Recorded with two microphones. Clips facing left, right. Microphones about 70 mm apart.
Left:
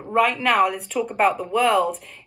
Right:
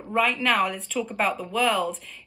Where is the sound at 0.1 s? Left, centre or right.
Centre.